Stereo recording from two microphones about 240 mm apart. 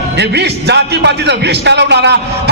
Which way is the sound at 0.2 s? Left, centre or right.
Right.